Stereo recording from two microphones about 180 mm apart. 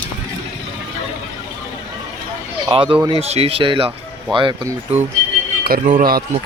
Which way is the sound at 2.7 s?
30° right (ahead or behind).